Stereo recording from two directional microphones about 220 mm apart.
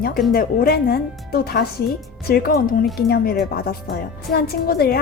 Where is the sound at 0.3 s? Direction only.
40° left (ahead or behind).